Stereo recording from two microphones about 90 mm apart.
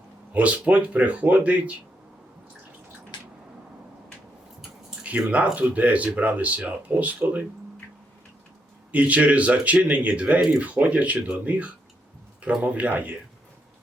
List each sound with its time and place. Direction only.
0.3 s speech: 15° right (ahead or behind)
5.0 s speech: 15° right (ahead or behind)
8.9 s speech: 15° right (ahead or behind)